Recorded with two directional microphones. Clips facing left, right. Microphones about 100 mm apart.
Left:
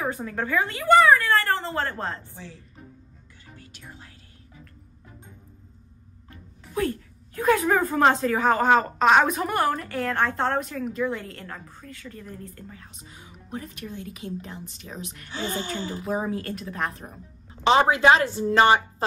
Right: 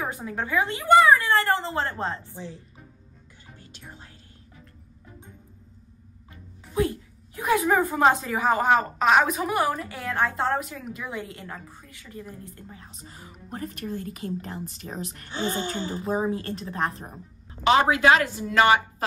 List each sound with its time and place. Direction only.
0.0 s a woman's voice: 15° right (ahead or behind)
3.5 s music: 25° right (ahead or behind)
6.3 s speech: 15° right (ahead or behind)
13.0 s a woman's voice: 40° right (ahead or behind)
17.6 s a woman's voice: 25° left (ahead or behind)